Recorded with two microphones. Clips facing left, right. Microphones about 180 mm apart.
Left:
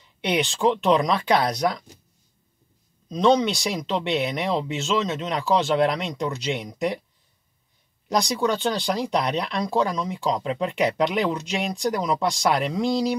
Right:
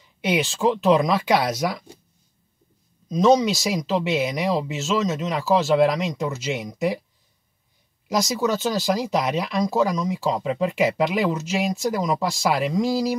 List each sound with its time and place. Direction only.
0.2 s speech: 5° right (ahead or behind)
3.4 s speech: 5° right (ahead or behind)
8.1 s speech: 5° right (ahead or behind)